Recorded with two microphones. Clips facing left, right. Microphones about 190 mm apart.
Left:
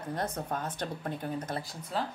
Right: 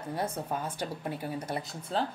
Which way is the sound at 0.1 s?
10° right (ahead or behind).